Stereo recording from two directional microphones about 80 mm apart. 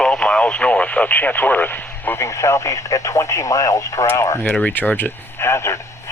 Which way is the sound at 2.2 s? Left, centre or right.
Left.